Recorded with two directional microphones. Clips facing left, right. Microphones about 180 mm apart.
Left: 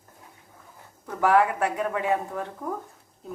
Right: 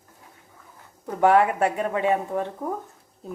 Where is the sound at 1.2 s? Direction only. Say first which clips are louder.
Right 3 dB; 25° right (ahead or behind).